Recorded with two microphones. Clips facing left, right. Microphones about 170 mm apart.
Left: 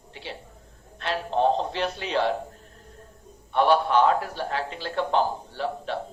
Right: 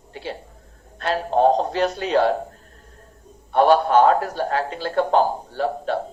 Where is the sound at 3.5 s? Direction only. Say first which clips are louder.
Right 5 dB; 45° right (ahead or behind).